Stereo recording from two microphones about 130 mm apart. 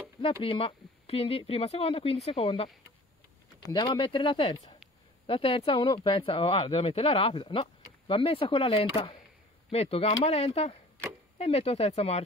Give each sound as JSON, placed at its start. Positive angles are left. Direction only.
{"t": 0.2, "sound": "speech", "side_deg": 45}
{"t": 3.7, "sound": "speech", "side_deg": 40}